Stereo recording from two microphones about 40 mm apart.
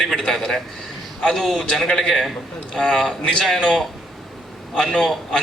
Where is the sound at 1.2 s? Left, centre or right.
Centre.